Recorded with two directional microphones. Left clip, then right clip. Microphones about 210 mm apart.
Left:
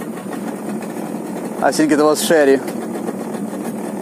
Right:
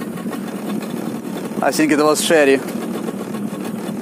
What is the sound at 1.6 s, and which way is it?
Speech, 15° right (ahead or behind).